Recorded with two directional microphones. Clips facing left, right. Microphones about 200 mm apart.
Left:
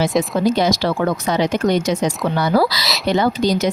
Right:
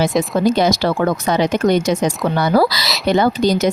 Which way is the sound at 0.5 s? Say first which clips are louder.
Right 2 dB; 50° right (ahead or behind).